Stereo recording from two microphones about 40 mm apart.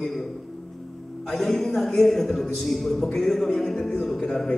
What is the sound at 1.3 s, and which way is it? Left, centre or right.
A man's voice, centre.